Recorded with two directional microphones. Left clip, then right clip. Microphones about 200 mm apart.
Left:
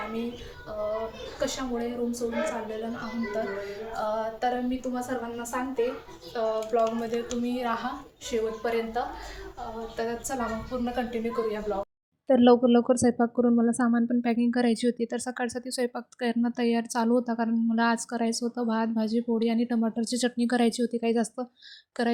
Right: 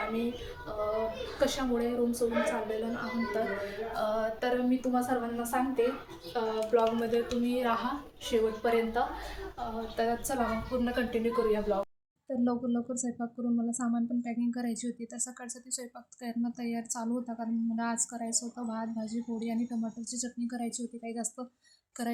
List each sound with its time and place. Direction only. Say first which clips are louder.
1.4 s a woman's voice: even; centre (ahead or behind)
4.1 s a woman's voice: left 4 dB; 5° left (ahead or behind)
12.3 s speech: left 13 dB; 35° left (ahead or behind)